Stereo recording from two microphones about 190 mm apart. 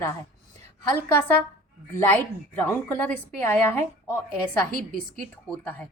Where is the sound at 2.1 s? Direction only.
10° left (ahead or behind).